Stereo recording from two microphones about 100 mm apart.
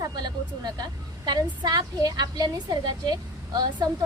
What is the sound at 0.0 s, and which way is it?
A woman's voice, 45° right (ahead or behind).